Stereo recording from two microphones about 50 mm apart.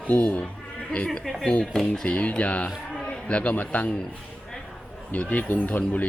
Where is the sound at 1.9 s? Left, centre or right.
Left.